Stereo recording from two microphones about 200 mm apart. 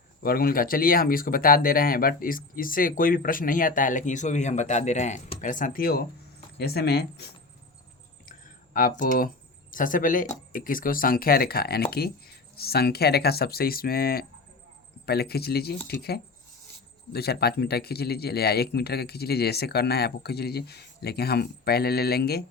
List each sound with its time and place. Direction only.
0.2 s speech: 45° left (ahead or behind)
8.3 s a sound: 45° left (ahead or behind)
9.7 s speech: 40° left (ahead or behind)